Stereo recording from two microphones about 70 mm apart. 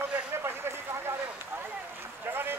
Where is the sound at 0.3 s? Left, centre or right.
Right.